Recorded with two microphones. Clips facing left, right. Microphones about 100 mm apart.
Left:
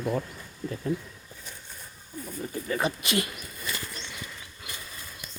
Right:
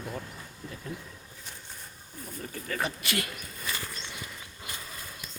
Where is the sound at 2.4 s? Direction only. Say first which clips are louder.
Left 4 dB; 20° left (ahead or behind).